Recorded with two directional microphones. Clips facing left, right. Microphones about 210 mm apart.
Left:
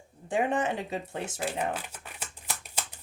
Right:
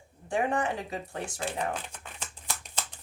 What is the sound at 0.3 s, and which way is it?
Speech, 20° left (ahead or behind).